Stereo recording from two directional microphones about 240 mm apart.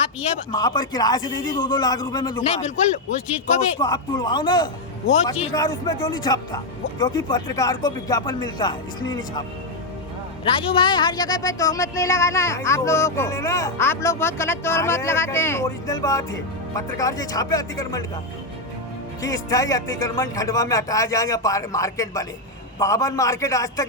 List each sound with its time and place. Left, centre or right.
0.5 s a woman's voice: centre
3.8 s a woman's voice: centre
10.4 s a woman's voice: left
19.2 s a woman's voice: centre